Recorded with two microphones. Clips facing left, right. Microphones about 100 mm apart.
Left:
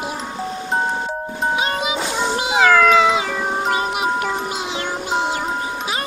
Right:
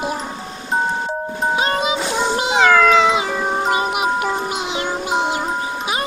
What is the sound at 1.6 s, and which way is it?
Music, 35° right (ahead or behind).